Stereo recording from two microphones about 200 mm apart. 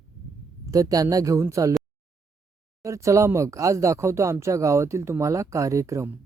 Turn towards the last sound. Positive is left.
turn(degrees=-15)  # may be behind; listen again after turning